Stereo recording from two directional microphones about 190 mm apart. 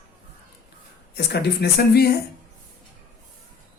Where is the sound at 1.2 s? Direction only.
60° left (ahead or behind).